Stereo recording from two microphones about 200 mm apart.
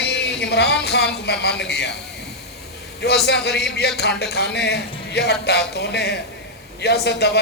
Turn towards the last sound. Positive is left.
turn(degrees=55)  # may be behind; listen again after turning